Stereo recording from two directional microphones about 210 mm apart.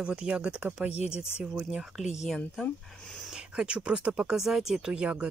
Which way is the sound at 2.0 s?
35° left (ahead or behind).